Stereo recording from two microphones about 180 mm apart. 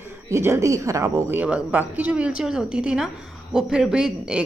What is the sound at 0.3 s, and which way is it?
A man's voice, 15° right (ahead or behind).